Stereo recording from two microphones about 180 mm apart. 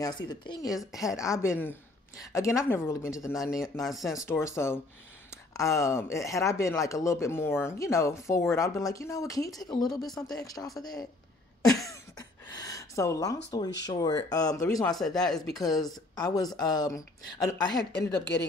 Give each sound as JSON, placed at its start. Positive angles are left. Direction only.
{"t": 0.0, "sound": "speech", "side_deg": 25}
{"t": 3.7, "sound": "speech", "side_deg": 0}
{"t": 4.2, "sound": "speech", "side_deg": 15}
{"t": 9.8, "sound": "speech", "side_deg": 0}
{"t": 10.3, "sound": "speech", "side_deg": 20}
{"t": 11.9, "sound": "a sound", "side_deg": 20}
{"t": 13.8, "sound": "speech", "side_deg": 20}
{"t": 14.9, "sound": "speech", "side_deg": 0}
{"t": 15.6, "sound": "speech", "side_deg": 20}
{"t": 18.0, "sound": "a woman's voice", "side_deg": 70}